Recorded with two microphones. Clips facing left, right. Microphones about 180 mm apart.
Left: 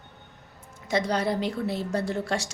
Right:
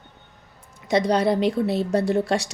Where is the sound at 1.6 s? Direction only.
70° right (ahead or behind).